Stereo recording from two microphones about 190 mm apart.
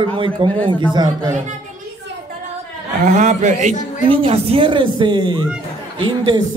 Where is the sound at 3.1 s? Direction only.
40° right (ahead or behind).